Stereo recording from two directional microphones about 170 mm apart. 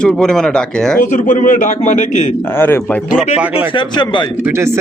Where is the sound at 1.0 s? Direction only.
50° left (ahead or behind).